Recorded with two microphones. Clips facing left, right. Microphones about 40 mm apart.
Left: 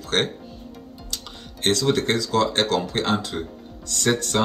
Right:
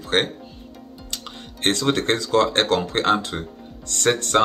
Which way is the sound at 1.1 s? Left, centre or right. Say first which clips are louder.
Right 2 dB; right.